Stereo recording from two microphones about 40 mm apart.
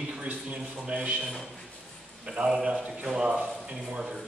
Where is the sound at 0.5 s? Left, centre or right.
Right.